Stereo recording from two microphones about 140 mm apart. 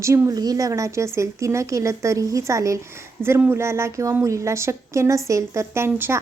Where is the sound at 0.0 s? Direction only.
20° right (ahead or behind).